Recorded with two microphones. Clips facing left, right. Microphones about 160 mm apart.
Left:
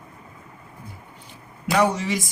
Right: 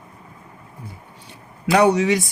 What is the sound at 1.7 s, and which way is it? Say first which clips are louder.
Speech: right 5 dB; 70° right (ahead or behind).